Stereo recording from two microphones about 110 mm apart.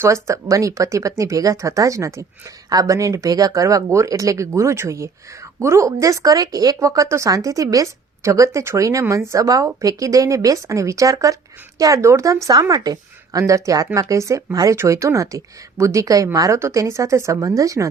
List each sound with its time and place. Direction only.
0.0 s speech: 25° right (ahead or behind)